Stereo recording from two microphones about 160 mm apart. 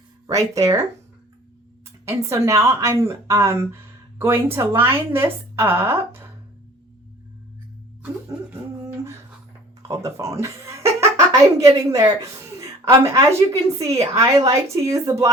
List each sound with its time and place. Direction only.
0.3 s speech: 20° right (ahead or behind)
2.0 s a woman's voice: 20° right (ahead or behind)
8.8 s a sound: 15° right (ahead or behind)
9.9 s speech: 20° right (ahead or behind)